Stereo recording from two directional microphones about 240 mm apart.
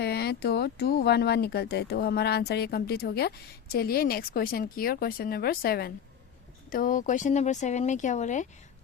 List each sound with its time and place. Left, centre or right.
0.0 s speech: left